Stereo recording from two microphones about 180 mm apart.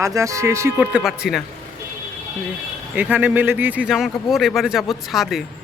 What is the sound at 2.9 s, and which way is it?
Speech, 10° right (ahead or behind).